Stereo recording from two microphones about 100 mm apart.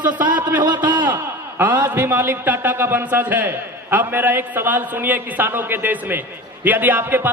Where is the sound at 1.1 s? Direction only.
20° right (ahead or behind).